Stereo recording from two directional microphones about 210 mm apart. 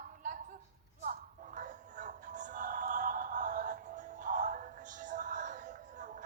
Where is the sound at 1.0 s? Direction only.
40° right (ahead or behind).